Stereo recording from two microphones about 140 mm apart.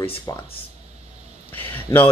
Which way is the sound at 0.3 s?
25° left (ahead or behind).